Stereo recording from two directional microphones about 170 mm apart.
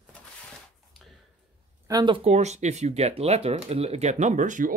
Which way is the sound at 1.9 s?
25° right (ahead or behind).